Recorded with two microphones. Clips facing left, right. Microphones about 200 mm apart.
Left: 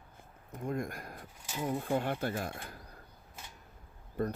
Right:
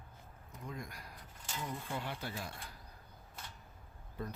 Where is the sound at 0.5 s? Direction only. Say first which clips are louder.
Left 10 dB; 50° left (ahead or behind).